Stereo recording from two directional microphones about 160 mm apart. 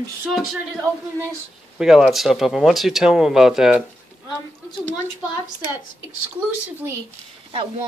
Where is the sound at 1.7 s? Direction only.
5° right (ahead or behind).